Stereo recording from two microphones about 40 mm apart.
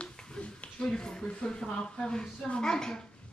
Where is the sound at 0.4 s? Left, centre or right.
Left.